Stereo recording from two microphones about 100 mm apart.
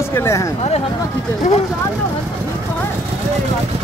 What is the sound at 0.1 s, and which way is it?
Speech, 30° left (ahead or behind).